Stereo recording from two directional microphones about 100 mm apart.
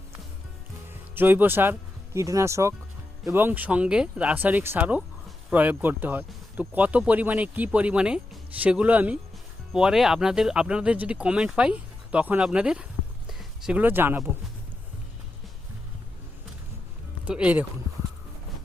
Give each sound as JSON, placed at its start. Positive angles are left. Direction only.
{"t": 1.1, "sound": "speech", "side_deg": -20}
{"t": 13.2, "sound": "a sound", "side_deg": -5}
{"t": 13.7, "sound": "speech", "side_deg": -20}
{"t": 17.2, "sound": "speech", "side_deg": -15}